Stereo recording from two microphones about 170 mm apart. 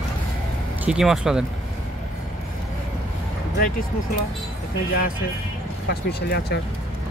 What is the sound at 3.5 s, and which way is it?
Speech, 55° left (ahead or behind).